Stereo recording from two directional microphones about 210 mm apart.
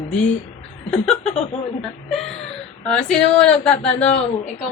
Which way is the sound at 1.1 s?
30° left (ahead or behind).